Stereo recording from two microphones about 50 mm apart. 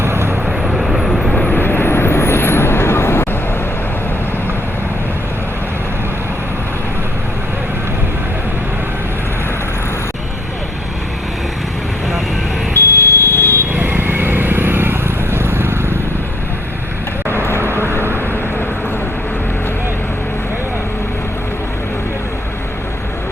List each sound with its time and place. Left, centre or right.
0.0 s vehicle: right
0.4 s vehicle: centre
1.5 s vehicle: left
12.7 s smoke detector: left
13.7 s vehicle: right
17.6 s vehicle: right